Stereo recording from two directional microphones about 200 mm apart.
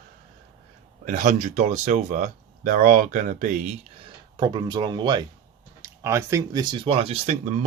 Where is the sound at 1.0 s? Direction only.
40° right (ahead or behind).